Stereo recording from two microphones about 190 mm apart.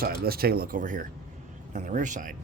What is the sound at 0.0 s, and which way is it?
A man's voice, 50° right (ahead or behind).